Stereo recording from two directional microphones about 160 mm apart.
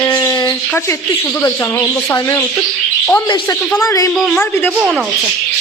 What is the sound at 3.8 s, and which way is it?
Speech, 20° left (ahead or behind).